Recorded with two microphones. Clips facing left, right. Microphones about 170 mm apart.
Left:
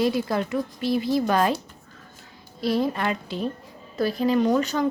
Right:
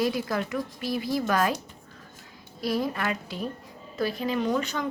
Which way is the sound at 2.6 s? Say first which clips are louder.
Left 4 dB; 25° left (ahead or behind).